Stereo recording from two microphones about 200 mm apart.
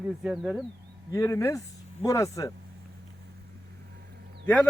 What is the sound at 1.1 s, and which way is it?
A man's voice, 15° left (ahead or behind).